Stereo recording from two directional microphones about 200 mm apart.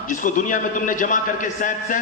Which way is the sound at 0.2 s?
40° left (ahead or behind).